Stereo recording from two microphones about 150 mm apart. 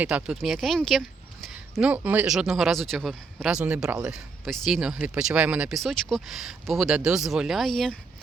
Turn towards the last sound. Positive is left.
turn(degrees=0)  # may be behind; listen again after turning